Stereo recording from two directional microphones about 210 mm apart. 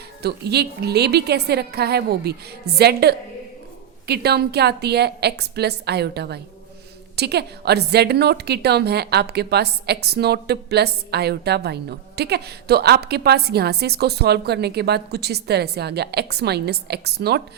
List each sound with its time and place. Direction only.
0.2 s a woman's voice: 50° right (ahead or behind)